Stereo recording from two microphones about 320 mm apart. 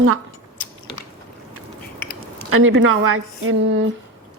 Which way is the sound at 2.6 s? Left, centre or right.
Right.